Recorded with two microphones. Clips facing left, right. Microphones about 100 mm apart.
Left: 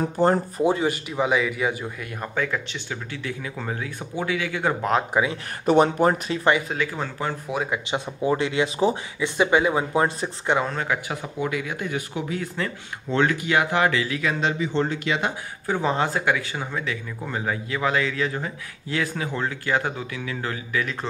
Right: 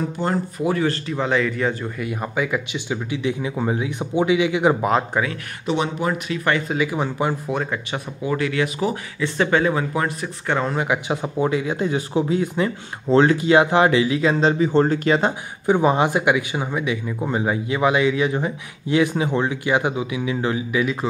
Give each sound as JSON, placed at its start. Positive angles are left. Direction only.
{"t": 0.0, "sound": "speech", "side_deg": 35}
{"t": 2.2, "sound": "speech", "side_deg": -10}
{"t": 5.1, "sound": "speech", "side_deg": 15}
{"t": 5.7, "sound": "speech", "side_deg": 45}
{"t": 6.7, "sound": "speech", "side_deg": -10}
{"t": 7.4, "sound": "speech", "side_deg": 5}
{"t": 8.2, "sound": "speech", "side_deg": 25}
{"t": 9.2, "sound": "speech", "side_deg": 15}
{"t": 10.7, "sound": "speech", "side_deg": -15}
{"t": 11.3, "sound": "speech", "side_deg": -30}
{"t": 13.1, "sound": "speech", "side_deg": -30}
{"t": 15.6, "sound": "speech", "side_deg": -15}